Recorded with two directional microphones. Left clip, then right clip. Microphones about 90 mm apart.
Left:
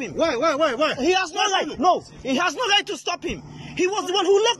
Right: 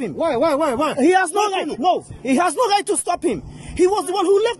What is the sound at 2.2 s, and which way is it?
Speech, 90° right.